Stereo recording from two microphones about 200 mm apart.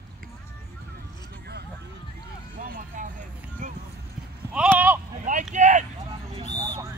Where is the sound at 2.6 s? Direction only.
40° right (ahead or behind).